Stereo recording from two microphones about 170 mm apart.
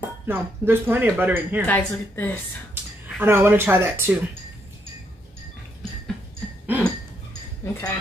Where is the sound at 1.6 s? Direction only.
10° left (ahead or behind).